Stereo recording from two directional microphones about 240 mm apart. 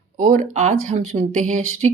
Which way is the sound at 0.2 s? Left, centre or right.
Right.